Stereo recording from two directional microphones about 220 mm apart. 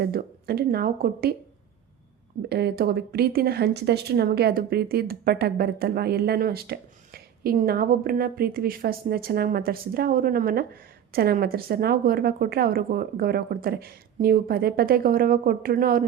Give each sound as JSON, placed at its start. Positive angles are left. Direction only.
{"t": 0.0, "sound": "speech", "side_deg": -45}
{"t": 2.5, "sound": "speech", "side_deg": -45}